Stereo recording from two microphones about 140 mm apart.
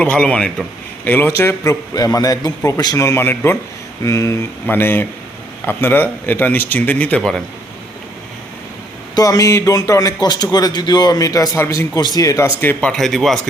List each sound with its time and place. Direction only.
0.0 s a man's voice: 10° left (ahead or behind)
9.1 s a man's voice: 25° left (ahead or behind)
11.9 s a man's voice: 30° left (ahead or behind)
12.5 s speech: 10° left (ahead or behind)